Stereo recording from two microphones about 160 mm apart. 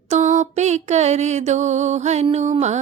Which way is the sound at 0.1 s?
50° right (ahead or behind).